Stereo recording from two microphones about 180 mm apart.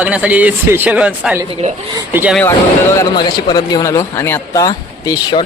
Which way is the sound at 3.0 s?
25° left (ahead or behind).